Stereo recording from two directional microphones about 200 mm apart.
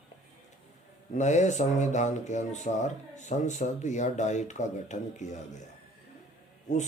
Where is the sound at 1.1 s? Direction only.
35° left (ahead or behind).